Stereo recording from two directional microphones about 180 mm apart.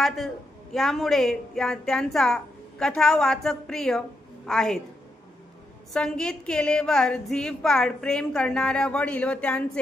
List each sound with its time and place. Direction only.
0.0 s a woman's voice: centre (ahead or behind)
5.9 s a woman's voice: 5° left (ahead or behind)